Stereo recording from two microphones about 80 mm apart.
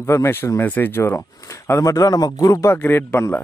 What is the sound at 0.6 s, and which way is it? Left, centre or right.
Speech, left.